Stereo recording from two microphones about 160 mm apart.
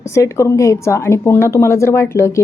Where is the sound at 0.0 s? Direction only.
20° left (ahead or behind).